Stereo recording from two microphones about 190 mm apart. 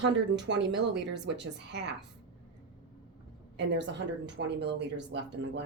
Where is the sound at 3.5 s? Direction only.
70° right (ahead or behind).